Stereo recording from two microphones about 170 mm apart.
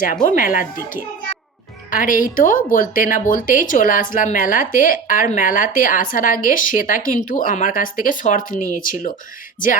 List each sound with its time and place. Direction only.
0.3 s a woman's voice: 55° left (ahead or behind)